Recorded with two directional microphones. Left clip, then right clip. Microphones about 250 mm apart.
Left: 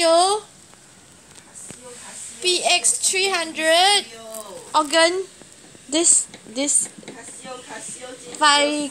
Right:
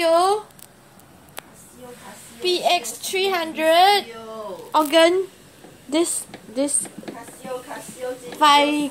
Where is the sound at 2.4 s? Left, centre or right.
Centre.